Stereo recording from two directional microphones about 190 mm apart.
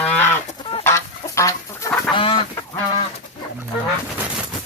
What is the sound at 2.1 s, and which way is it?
Fowl, 30° left (ahead or behind).